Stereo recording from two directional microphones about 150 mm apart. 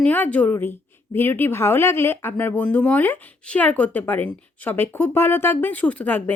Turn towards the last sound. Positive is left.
turn(degrees=10)  # may be behind; listen again after turning